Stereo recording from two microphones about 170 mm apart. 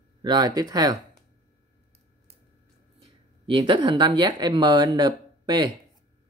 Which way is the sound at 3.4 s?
30° right (ahead or behind).